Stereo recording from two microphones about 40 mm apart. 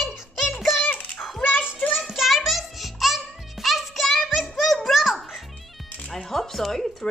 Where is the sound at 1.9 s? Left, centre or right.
Centre.